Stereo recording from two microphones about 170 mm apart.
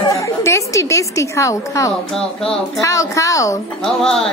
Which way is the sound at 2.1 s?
5° left (ahead or behind).